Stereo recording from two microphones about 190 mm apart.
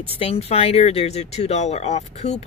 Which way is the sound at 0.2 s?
30° left (ahead or behind).